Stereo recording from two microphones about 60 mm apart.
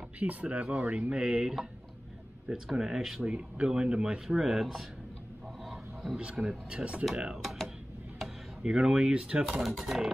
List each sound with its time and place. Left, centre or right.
0.2 s speech: right; by 3.2 s centre
3.3 s speech: centre
4.4 s speech: centre
6.1 s speech: centre
8.2 s a sound: centre
9.1 s speech: centre
9.5 s speech: centre